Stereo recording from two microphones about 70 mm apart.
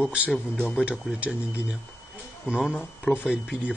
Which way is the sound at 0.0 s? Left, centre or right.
Centre.